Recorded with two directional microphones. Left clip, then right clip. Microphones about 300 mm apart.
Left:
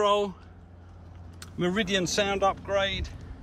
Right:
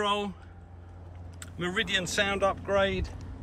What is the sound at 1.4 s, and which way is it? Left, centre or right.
Speech, centre.